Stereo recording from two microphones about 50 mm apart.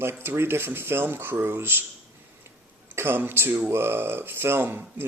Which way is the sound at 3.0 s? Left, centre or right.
Right.